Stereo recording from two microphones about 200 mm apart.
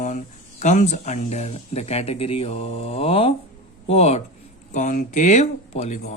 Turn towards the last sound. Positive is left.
turn(degrees=35)  # may be behind; listen again after turning